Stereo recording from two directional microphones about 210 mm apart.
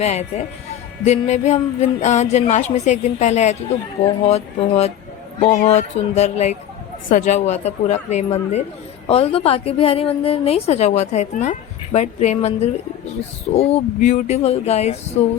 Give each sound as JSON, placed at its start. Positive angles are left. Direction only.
{"t": 0.0, "sound": "a woman's voice", "side_deg": 30}